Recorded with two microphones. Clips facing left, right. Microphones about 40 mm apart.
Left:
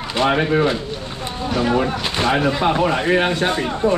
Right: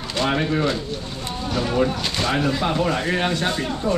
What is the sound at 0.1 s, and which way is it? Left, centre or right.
Speech, centre.